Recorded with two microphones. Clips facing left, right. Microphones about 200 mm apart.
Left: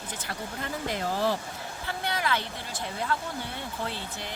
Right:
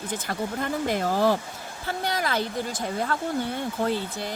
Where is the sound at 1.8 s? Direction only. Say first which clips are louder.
Right 4 dB; 40° right (ahead or behind).